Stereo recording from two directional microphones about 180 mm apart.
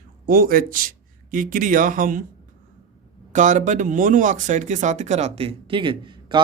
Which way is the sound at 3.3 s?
45° right (ahead or behind).